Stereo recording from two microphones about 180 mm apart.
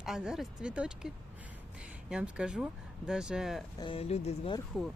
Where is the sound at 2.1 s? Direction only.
5° right (ahead or behind).